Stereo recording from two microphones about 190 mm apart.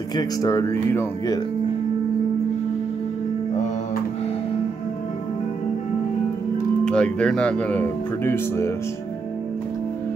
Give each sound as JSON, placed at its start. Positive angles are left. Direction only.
{"t": 0.1, "sound": "speech", "side_deg": 20}
{"t": 6.8, "sound": "speech", "side_deg": 5}